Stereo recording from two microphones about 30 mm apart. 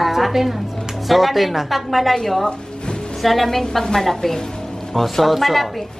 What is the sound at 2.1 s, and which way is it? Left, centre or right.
A woman's voice, centre.